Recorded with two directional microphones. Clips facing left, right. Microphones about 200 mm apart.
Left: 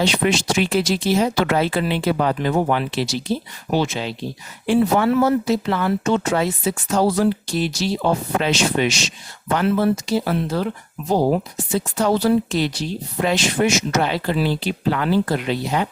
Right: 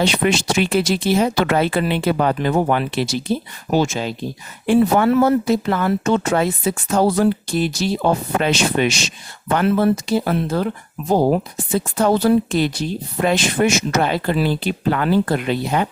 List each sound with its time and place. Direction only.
0.0 s speech: 60° right (ahead or behind)